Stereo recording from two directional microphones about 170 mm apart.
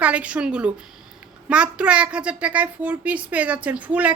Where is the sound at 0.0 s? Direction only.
10° right (ahead or behind).